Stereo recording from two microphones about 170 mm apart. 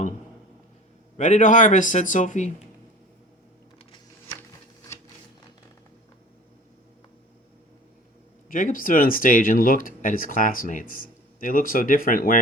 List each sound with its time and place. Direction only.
1.1 s speech: 45° left (ahead or behind)
8.4 s speech: 55° left (ahead or behind)